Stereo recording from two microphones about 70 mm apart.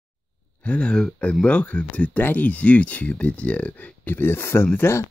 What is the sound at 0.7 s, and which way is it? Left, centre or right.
Speech, centre.